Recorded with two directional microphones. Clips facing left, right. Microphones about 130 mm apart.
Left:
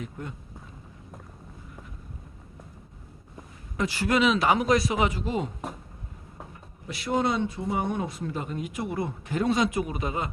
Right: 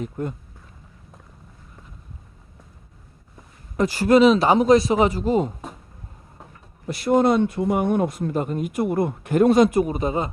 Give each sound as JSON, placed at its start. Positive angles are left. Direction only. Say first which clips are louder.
{"t": 0.0, "sound": "speech", "louder": "right 9 dB", "side_deg": -45}
{"t": 3.8, "sound": "speech", "louder": "right 9 dB", "side_deg": -40}
{"t": 6.8, "sound": "speech", "louder": "right 8 dB", "side_deg": -45}